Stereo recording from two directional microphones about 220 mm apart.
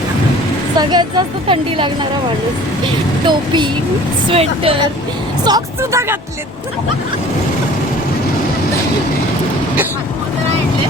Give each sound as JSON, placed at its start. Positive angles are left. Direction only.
{"t": 0.8, "sound": "a woman's voice", "side_deg": -20}
{"t": 3.2, "sound": "a woman's voice", "side_deg": -20}